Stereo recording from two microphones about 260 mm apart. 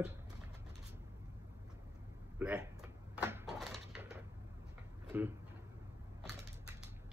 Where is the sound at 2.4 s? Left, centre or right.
Centre.